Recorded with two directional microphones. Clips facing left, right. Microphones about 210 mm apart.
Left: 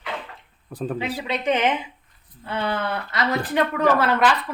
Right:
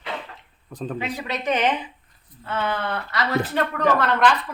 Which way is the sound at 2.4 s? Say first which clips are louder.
Left 1 dB; 15° left (ahead or behind).